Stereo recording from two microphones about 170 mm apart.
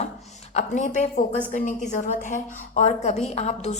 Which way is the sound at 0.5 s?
45° left (ahead or behind).